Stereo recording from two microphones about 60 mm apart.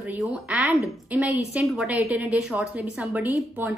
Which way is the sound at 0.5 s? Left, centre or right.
Right.